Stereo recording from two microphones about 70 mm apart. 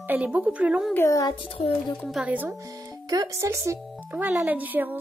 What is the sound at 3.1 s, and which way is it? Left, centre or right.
Speech, right.